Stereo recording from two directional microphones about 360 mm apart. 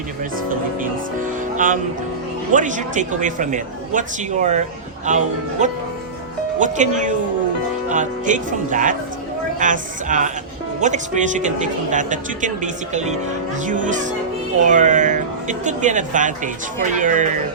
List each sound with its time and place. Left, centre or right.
1.5 s music: right
2.5 s speech: right